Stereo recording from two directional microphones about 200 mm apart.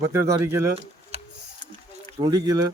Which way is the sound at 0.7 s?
30° right (ahead or behind).